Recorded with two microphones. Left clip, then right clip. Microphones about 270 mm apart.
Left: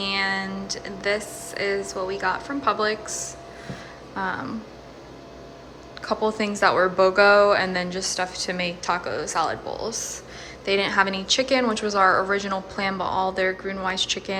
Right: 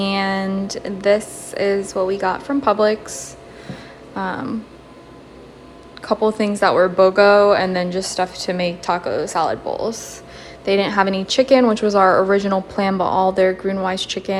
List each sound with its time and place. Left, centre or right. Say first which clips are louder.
0.0 s speech: right 4 dB; centre
3.7 s a sound: right 6 dB; centre
6.0 s speech: right 6 dB; centre